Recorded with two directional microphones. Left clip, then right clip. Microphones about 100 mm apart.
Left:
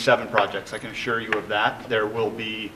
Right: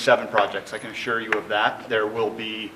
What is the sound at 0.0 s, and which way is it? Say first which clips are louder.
Speech: right 1 dB; 20° left (ahead or behind).